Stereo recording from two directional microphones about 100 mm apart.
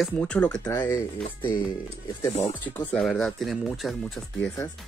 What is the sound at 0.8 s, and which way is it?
Speech, 25° left (ahead or behind).